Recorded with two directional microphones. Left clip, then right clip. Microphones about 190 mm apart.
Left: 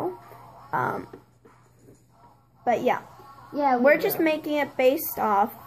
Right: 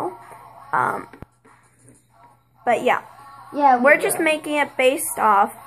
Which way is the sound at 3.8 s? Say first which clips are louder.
Right 4 dB; centre (ahead or behind).